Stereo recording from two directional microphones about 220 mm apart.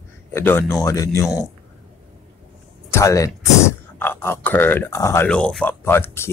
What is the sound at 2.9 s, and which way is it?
Speech, 15° left (ahead or behind).